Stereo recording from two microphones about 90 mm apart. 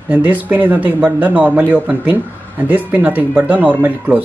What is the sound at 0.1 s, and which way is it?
Speech, 20° right (ahead or behind).